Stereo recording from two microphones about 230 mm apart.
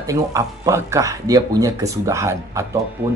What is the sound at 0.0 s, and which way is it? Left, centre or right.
Speech, centre.